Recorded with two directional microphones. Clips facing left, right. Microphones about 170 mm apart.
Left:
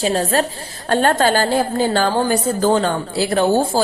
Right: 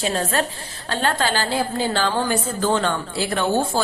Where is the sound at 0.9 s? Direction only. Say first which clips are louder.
Left 7 dB; 45° left (ahead or behind).